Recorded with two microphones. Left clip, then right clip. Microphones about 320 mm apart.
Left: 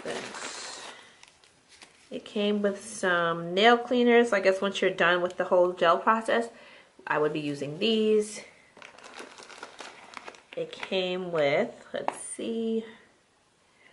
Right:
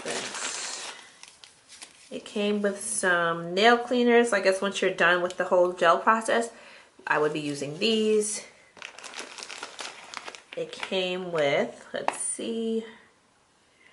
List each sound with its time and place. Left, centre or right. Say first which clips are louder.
0.0 s a sound: right 3 dB; centre
2.2 s speech: even; centre
12.4 s speech: even; left